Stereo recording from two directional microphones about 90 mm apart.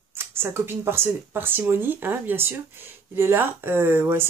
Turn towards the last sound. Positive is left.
turn(degrees=-25)  # may be behind; listen again after turning